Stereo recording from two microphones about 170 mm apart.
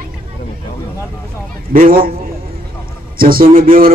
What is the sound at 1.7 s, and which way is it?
Speech, 55° right (ahead or behind).